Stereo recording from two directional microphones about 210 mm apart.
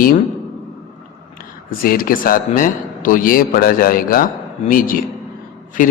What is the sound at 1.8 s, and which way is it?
A man's voice, 45° left (ahead or behind).